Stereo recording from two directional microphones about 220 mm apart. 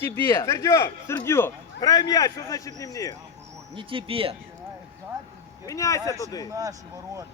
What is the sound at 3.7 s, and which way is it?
Speech, 25° right (ahead or behind).